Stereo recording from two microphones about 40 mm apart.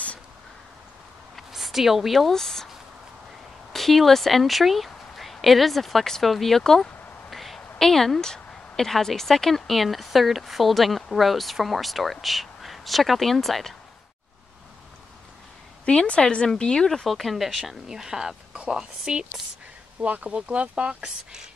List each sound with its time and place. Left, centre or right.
1.5 s a woman's voice: centre
2.3 s speech: centre
3.7 s speech: centre
15.8 s a woman's voice: left
16.5 s speech: centre
17.1 s a woman's voice: centre
20.0 s speech: right
21.0 s speech: centre